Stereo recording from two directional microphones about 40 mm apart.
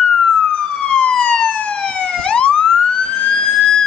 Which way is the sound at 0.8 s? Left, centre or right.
Left.